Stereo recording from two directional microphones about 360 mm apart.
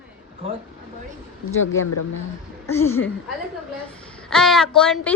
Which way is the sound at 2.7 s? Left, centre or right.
Centre.